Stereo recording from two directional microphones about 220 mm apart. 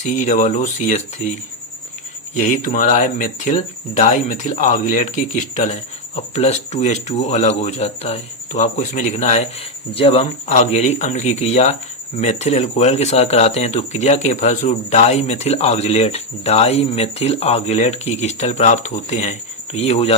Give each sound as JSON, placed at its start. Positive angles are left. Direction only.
{"t": 0.0, "sound": "speech", "side_deg": 35}
{"t": 2.3, "sound": "speech", "side_deg": 35}